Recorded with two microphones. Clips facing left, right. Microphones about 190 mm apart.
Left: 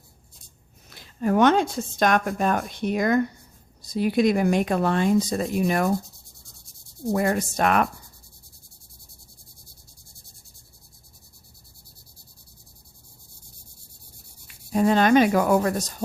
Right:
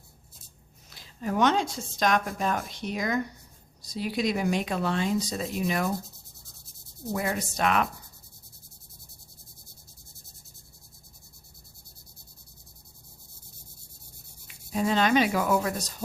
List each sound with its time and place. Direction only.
0.9 s speech: 55° left (ahead or behind)
7.1 s speech: 50° left (ahead or behind)
14.4 s speech: 50° left (ahead or behind)